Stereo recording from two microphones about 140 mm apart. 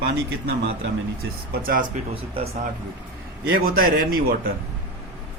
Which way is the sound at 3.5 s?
90° right.